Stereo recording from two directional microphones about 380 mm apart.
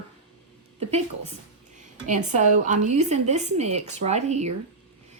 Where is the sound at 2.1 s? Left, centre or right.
Centre.